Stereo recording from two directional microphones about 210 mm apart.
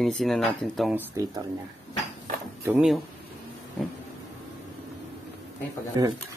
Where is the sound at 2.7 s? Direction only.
Centre (ahead or behind).